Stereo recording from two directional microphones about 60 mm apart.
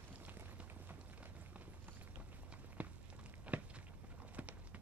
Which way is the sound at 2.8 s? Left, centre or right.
Right.